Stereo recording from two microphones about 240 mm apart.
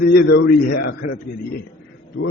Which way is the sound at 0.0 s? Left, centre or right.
Left.